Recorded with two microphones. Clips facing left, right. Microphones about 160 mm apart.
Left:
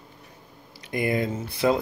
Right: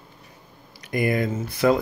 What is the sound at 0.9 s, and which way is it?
Speech, 25° left (ahead or behind).